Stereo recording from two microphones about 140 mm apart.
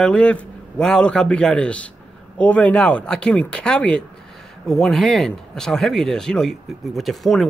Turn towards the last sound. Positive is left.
turn(degrees=0)  # may be behind; listen again after turning